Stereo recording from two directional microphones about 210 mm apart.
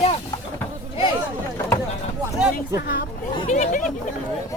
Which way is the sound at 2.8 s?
45° left (ahead or behind).